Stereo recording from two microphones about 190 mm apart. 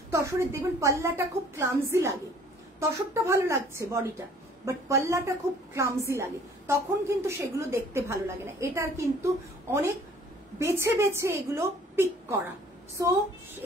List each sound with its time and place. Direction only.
0.1 s a woman's voice: 15° right (ahead or behind)